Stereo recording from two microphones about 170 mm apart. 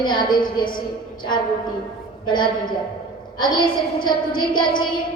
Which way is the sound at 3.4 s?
25° left (ahead or behind).